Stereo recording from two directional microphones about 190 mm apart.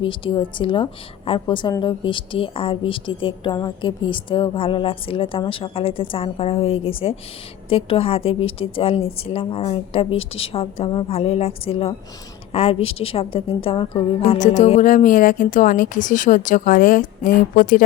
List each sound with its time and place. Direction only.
0.0 s a woman's voice: 25° left (ahead or behind); by 17.8 s 45° left (ahead or behind)